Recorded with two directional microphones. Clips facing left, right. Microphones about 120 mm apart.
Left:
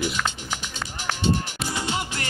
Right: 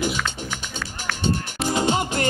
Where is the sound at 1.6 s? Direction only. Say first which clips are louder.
Right 10 dB; 45° right (ahead or behind).